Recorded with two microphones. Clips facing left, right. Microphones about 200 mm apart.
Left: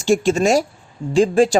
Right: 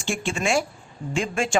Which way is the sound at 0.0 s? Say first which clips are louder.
Left 11 dB; 40° left (ahead or behind).